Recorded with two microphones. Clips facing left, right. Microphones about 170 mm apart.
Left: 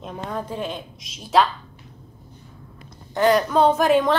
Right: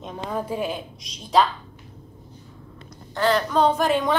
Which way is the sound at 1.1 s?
5° left (ahead or behind).